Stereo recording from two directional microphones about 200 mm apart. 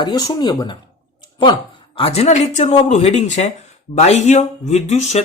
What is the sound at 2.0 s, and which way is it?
Speech, 30° left (ahead or behind).